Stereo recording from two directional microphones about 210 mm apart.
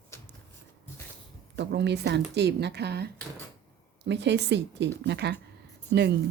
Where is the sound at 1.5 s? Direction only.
55° right (ahead or behind).